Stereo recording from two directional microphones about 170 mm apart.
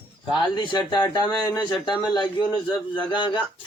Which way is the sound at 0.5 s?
25° left (ahead or behind).